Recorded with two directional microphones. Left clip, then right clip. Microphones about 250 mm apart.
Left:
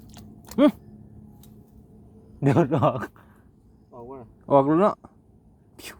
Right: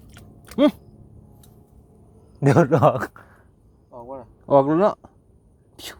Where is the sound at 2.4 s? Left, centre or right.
Right.